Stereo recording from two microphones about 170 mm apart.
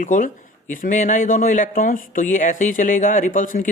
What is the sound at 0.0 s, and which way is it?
Speech, 50° left (ahead or behind).